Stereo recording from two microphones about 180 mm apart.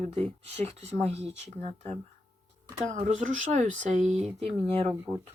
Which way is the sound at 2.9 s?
40° right (ahead or behind).